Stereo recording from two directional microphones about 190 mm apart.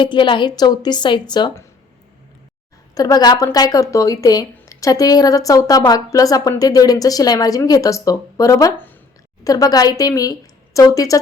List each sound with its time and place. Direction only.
0.0 s speech: 25° left (ahead or behind)
2.9 s a woman's voice: 20° left (ahead or behind)